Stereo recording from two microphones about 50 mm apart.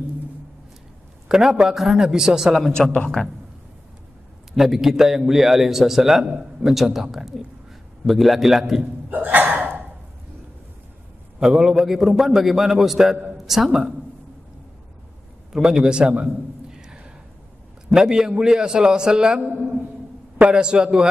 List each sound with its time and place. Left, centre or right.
1.3 s a man's voice: centre
4.6 s a man's voice: centre
8.8 s hiccup: right
11.3 s a man's voice: centre
15.5 s a man's voice: centre
16.7 s a sound: centre
17.8 s a man's voice: centre
19.4 s a man's voice: right